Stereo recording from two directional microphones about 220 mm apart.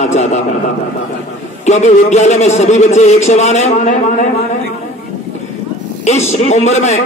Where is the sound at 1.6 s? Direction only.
30° left (ahead or behind).